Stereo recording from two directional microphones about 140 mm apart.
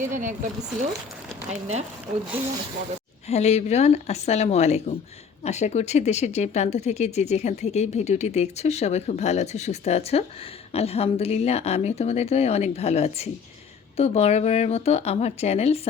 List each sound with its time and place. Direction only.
0.1 s speech: 65° right (ahead or behind)
1.5 s speech: 55° right (ahead or behind)
3.2 s speech: 50° left (ahead or behind)